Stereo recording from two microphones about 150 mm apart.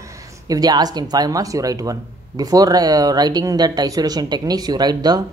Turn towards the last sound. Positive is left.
turn(degrees=-25)  # may be behind; listen again after turning